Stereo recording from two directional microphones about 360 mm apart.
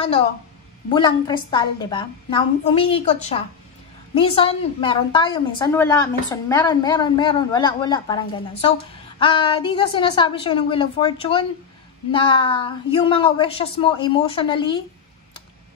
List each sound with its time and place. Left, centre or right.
0.8 s a woman's voice: centre